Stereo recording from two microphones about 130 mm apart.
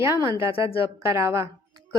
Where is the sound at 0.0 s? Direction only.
20° right (ahead or behind).